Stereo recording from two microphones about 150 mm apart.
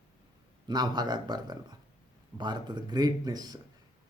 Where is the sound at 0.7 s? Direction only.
30° right (ahead or behind).